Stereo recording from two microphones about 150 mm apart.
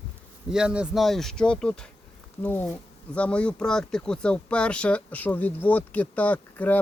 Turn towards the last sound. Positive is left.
turn(degrees=10)  # may be behind; listen again after turning